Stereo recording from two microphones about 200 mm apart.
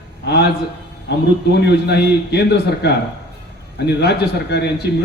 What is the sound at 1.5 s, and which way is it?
A man's voice, 55° left (ahead or behind).